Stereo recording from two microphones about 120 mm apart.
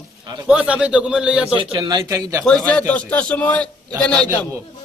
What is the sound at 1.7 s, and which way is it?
Speech, 35° right (ahead or behind).